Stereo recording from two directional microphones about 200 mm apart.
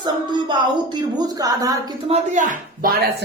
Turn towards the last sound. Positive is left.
turn(degrees=-45)  # may be behind; listen again after turning